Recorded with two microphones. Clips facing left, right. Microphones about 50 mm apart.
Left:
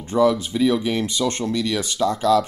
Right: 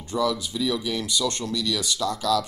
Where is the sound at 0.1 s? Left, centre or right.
Left.